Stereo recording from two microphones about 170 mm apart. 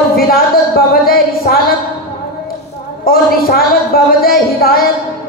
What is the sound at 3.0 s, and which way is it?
A woman's voice, 60° left (ahead or behind).